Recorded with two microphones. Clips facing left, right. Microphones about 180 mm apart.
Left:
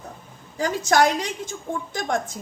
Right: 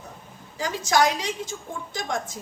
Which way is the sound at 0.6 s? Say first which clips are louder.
Left 3 dB; 55° left (ahead or behind).